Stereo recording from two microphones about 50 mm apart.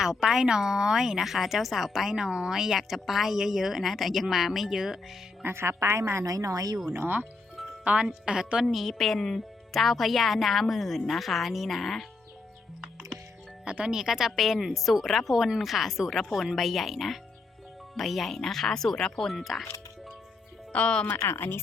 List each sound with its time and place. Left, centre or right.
0.0 s speech: centre
5.4 s a woman's voice: right
6.9 s speech: right
7.9 s speech: centre
8.7 s speech: centre
13.7 s speech: centre
20.7 s speech: left
21.1 s speech: left